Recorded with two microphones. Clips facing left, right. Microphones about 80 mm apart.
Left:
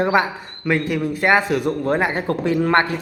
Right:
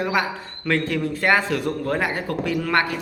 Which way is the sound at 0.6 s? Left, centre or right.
Centre.